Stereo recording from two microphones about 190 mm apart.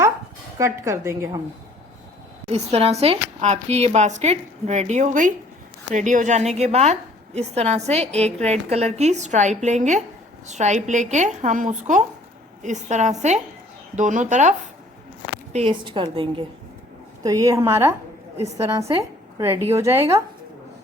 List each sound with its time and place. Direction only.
0.6 s a woman's voice: 15° right (ahead or behind)
2.5 s speech: 35° right (ahead or behind)
15.5 s a woman's voice: 30° right (ahead or behind)